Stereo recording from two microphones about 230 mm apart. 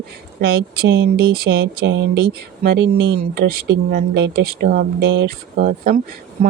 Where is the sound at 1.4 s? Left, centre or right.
Right.